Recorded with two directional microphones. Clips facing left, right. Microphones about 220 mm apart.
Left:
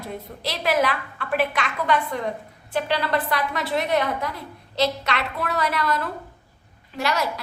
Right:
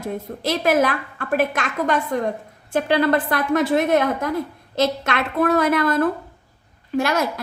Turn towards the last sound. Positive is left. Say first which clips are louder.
# right 5 dB
turn(degrees=-50)  # may be behind; listen again after turning